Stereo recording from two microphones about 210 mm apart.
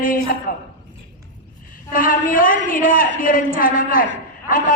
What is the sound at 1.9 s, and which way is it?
A woman's voice, 40° left (ahead or behind).